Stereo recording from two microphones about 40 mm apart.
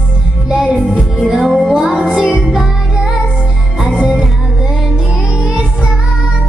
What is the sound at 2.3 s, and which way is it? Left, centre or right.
Music, centre.